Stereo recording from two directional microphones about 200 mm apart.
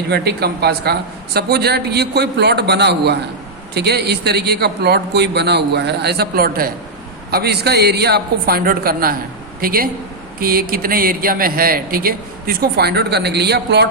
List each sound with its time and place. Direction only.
0.1 s a man's voice: 55° right (ahead or behind)